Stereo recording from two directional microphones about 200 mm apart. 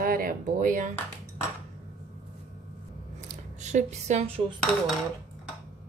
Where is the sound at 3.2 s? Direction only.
35° right (ahead or behind).